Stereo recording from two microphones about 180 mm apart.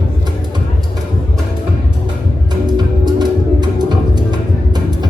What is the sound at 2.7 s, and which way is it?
Music, 25° right (ahead or behind).